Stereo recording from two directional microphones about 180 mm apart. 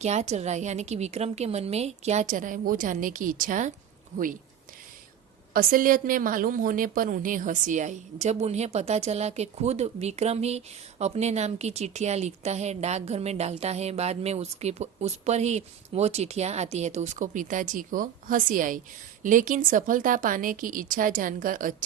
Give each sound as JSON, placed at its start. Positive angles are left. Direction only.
{"t": 0.0, "sound": "a woman's voice", "side_deg": -40}
{"t": 5.5, "sound": "a woman's voice", "side_deg": -50}